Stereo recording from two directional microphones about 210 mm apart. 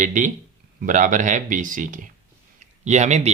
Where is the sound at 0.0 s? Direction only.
40° right (ahead or behind).